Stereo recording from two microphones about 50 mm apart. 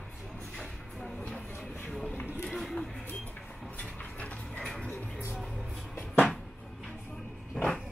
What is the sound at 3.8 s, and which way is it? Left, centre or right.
Mechanisms, left.